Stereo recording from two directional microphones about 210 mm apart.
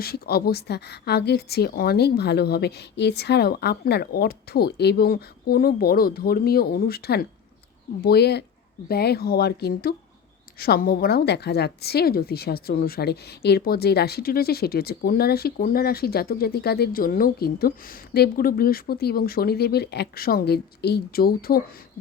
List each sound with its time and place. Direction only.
0.0 s a woman's voice: 50° left (ahead or behind)